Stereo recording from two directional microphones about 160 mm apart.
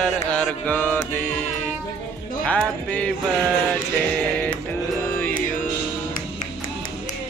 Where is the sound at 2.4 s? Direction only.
10° left (ahead or behind).